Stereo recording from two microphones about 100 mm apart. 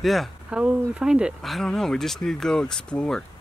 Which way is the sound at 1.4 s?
5° left (ahead or behind).